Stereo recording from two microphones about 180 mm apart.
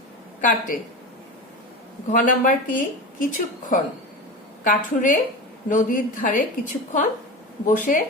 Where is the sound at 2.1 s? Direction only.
45° left (ahead or behind).